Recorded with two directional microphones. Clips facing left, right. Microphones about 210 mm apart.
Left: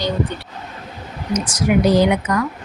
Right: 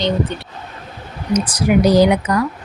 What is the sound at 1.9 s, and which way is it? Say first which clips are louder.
Speech: right 3 dB; 40° right (ahead or behind).